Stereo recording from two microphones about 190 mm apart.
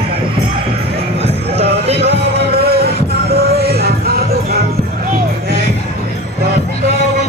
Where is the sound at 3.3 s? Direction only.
55° right (ahead or behind).